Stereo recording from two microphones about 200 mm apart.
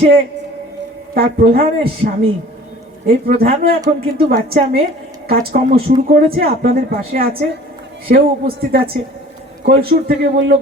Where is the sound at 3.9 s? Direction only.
45° right (ahead or behind).